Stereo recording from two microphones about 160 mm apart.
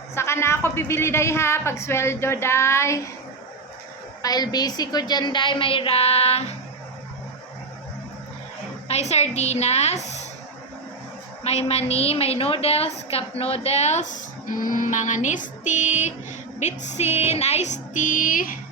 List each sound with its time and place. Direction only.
0.1 s a woman's voice: 15° left (ahead or behind)
4.2 s a woman's voice: 25° left (ahead or behind); by 6.4 s 40° left (ahead or behind)
8.9 s music: 40° left (ahead or behind)
11.4 s a woman's voice: 40° left (ahead or behind)
16.6 s music: 45° left (ahead or behind)